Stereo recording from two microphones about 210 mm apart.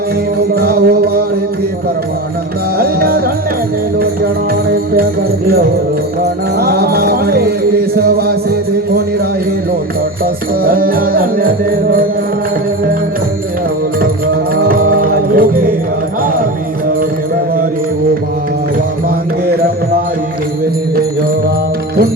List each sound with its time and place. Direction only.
0.5 s music: 45° right (ahead or behind)
2.7 s music: 45° right (ahead or behind)
6.6 s music: 50° right (ahead or behind)
10.6 s music: 45° right (ahead or behind)
14.5 s music: 45° right (ahead or behind)